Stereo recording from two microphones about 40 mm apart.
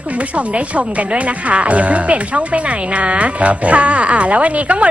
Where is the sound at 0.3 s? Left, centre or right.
Right.